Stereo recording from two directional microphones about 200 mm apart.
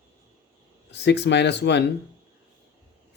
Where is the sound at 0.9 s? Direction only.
60° left (ahead or behind).